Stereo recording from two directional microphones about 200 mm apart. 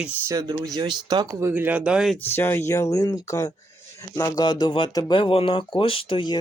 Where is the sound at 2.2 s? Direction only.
10° left (ahead or behind).